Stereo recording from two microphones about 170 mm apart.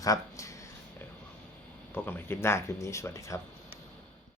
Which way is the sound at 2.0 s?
15° left (ahead or behind).